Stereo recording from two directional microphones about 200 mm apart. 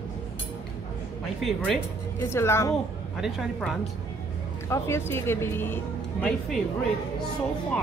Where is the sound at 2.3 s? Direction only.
15° left (ahead or behind).